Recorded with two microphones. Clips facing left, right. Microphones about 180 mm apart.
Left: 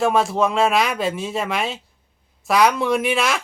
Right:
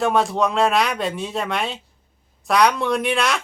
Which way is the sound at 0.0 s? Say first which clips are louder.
Left 1 dB; centre (ahead or behind).